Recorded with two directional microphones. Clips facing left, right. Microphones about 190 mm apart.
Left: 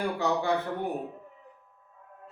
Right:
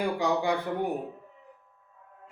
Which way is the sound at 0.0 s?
15° right (ahead or behind).